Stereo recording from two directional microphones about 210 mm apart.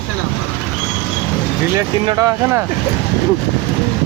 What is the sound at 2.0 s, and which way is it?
Speech, 20° right (ahead or behind).